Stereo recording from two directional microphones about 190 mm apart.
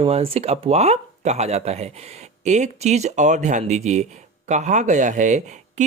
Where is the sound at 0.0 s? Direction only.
30° right (ahead or behind).